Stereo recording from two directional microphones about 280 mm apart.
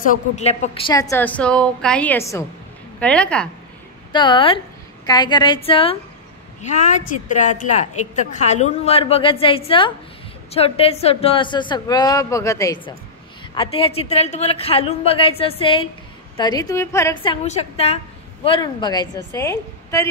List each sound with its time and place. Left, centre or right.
0.0 s a woman's voice: left; by 3.4 s centre
4.1 s a woman's voice: centre